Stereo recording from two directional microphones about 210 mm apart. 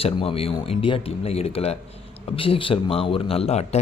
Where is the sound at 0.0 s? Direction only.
25° left (ahead or behind).